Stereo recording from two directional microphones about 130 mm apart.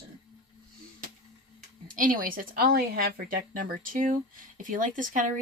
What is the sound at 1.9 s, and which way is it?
Speech, 90° right.